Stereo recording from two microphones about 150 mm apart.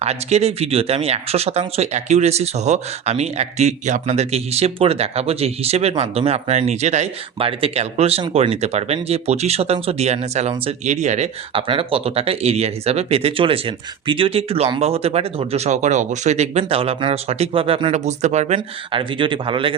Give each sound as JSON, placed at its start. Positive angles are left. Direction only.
{"t": 0.0, "sound": "speech", "side_deg": -45}
{"t": 11.7, "sound": "speech", "side_deg": -35}
{"t": 17.9, "sound": "speech", "side_deg": -50}
{"t": 18.9, "sound": "speech", "side_deg": -35}